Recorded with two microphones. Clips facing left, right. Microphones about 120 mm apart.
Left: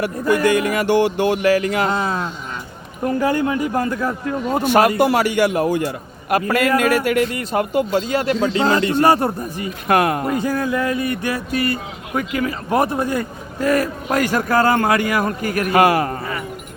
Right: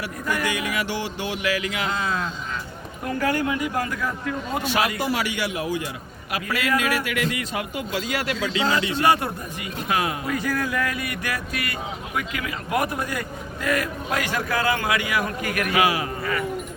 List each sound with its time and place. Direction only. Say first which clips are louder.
0.4 s speech: left 9 dB; 50° left (ahead or behind); by 4.6 s 30° left (ahead or behind)
4.6 s speech: left 11 dB; 50° left (ahead or behind)
7.9 s speech: left 4 dB; 30° left (ahead or behind)
9.9 s speech: left 9 dB; 55° left (ahead or behind)
10.2 s speech: left 5 dB; 25° left (ahead or behind)
15.7 s speech: left 8 dB; 50° left (ahead or behind)